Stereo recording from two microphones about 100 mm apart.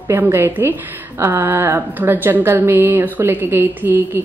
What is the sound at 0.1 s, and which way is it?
Speech, 20° right (ahead or behind).